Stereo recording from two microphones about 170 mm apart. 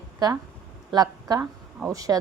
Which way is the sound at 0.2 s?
25° right (ahead or behind).